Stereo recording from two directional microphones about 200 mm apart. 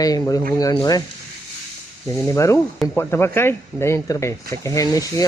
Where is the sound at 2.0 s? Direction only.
15° left (ahead or behind).